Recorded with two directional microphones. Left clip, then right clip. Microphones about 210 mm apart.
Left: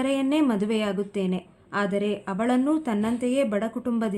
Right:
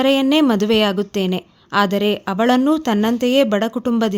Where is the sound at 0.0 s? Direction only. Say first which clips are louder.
Right 9 dB; 40° right (ahead or behind).